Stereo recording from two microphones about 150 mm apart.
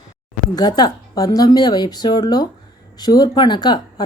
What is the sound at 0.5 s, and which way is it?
Speech, 25° left (ahead or behind).